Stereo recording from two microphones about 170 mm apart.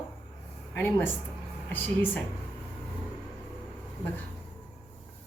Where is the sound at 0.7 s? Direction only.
10° left (ahead or behind).